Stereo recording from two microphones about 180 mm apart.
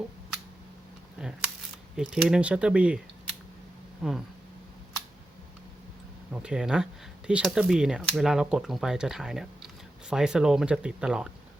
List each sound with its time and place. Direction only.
1.2 s camera: 5° right (ahead or behind)
2.0 s speech: 5° right (ahead or behind)
6.3 s speech: 5° right (ahead or behind)